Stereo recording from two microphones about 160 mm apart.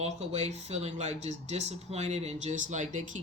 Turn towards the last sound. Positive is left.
turn(degrees=-50)  # may be behind; listen again after turning